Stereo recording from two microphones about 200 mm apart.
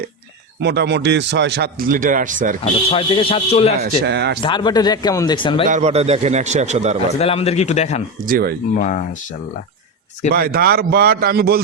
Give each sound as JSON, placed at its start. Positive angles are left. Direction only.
{"t": 0.6, "sound": "a man's voice", "side_deg": -60}
{"t": 1.9, "sound": "a man's voice", "side_deg": -40}
{"t": 2.9, "sound": "speech", "side_deg": 25}
{"t": 3.8, "sound": "a man's voice", "side_deg": -55}
{"t": 4.4, "sound": "speech", "side_deg": 20}
{"t": 5.6, "sound": "a man's voice", "side_deg": -35}
{"t": 7.2, "sound": "a man's voice", "side_deg": 30}
{"t": 8.3, "sound": "a man's voice", "side_deg": -45}
{"t": 8.7, "sound": "a man's voice", "side_deg": 40}
{"t": 10.3, "sound": "a man's voice", "side_deg": -50}